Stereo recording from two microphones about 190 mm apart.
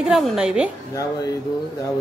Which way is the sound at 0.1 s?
5° right (ahead or behind).